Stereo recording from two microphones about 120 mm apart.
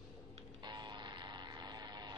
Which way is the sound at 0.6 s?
40° right (ahead or behind).